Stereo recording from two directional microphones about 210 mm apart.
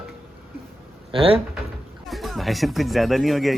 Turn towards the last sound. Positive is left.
turn(degrees=0)  # may be behind; listen again after turning